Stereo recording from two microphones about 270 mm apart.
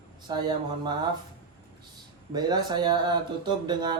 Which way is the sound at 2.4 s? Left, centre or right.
Centre.